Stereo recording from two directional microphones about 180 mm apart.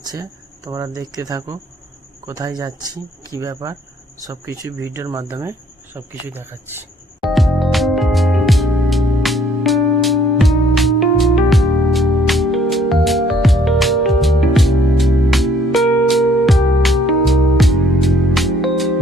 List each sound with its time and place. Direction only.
0.0 s speech: 20° right (ahead or behind)
7.3 s music: centre (ahead or behind)